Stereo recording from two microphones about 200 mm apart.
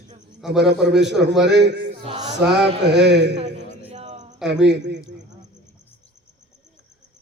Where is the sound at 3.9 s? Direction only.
35° right (ahead or behind).